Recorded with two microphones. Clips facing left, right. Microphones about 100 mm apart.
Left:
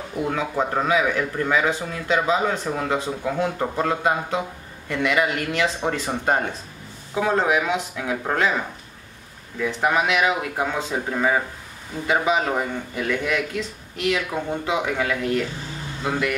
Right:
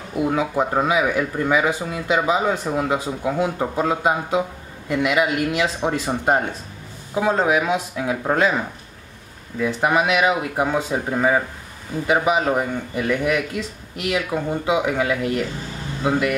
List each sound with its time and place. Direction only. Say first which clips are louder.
0.1 s a man's voice: right 4 dB; 10° right (ahead or behind)